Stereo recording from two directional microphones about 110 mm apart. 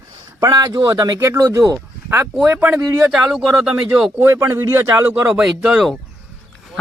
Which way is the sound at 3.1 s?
5° right (ahead or behind).